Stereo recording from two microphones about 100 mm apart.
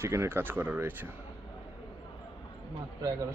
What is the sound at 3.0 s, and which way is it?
Speech, 30° right (ahead or behind).